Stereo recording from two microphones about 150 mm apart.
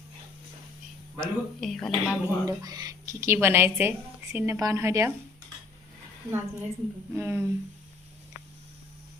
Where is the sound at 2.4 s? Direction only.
25° right (ahead or behind).